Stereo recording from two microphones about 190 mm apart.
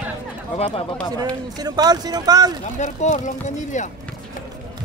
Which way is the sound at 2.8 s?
40° left (ahead or behind).